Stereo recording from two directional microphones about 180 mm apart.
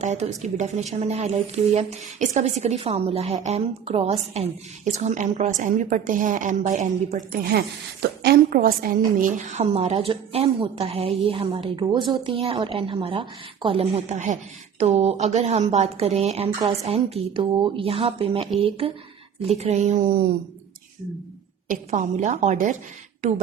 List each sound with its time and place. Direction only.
0.0 s a woman's voice: 40° right (ahead or behind)
8.2 s a woman's voice: 55° right (ahead or behind)
9.2 s a woman's voice: 40° right (ahead or behind)
21.7 s a woman's voice: 40° right (ahead or behind)